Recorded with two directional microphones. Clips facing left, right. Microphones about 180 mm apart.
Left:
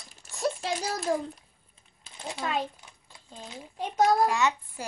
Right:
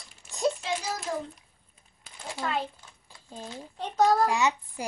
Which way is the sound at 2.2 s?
20° left (ahead or behind).